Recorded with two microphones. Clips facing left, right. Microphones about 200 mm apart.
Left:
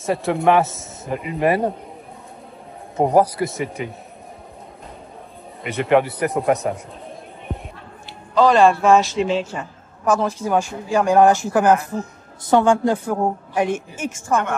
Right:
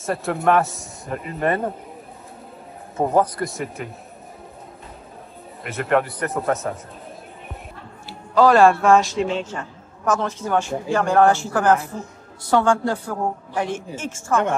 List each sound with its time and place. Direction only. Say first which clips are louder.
0.0 s a man's voice: left 3 dB; centre (ahead or behind)
3.0 s a man's voice: left 3 dB; 15° left (ahead or behind)
3.3 s a man's voice: left 3 dB; centre (ahead or behind)
5.6 s a man's voice: left 4 dB; centre (ahead or behind)
8.4 s a man's voice: even; 5° right (ahead or behind); by 14.4 s 15° left (ahead or behind)